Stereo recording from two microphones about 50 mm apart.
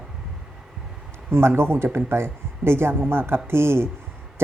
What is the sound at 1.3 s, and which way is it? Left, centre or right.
Speech, right.